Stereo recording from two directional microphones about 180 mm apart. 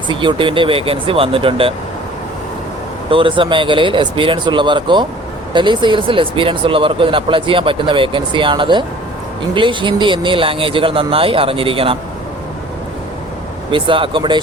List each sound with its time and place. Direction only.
0.1 s speech: 25° right (ahead or behind)
3.1 s speech: 30° right (ahead or behind)
13.7 s speech: 30° right (ahead or behind)